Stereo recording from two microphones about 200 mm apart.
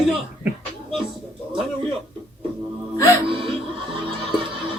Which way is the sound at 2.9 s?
15° left (ahead or behind).